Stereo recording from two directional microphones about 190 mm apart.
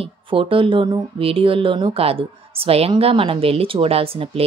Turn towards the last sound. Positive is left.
turn(degrees=-30)  # may be behind; listen again after turning